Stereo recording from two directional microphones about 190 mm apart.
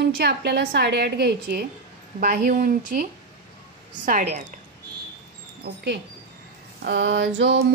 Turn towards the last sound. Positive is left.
turn(degrees=-70)  # may be behind; listen again after turning